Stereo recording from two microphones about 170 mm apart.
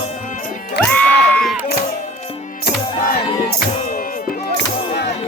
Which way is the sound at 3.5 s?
55° left (ahead or behind).